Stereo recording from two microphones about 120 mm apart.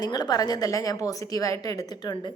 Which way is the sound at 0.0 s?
35° left (ahead or behind).